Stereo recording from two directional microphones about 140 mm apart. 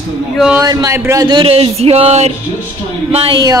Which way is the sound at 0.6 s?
25° right (ahead or behind).